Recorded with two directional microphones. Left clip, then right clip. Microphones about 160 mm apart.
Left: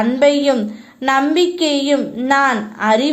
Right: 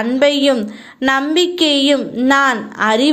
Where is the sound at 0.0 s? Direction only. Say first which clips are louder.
Even; 20° right (ahead or behind).